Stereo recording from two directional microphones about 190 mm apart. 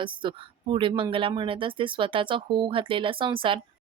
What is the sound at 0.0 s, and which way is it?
Speech, 25° right (ahead or behind).